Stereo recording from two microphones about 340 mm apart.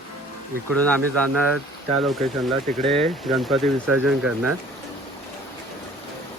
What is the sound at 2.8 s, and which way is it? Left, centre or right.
Speech, centre.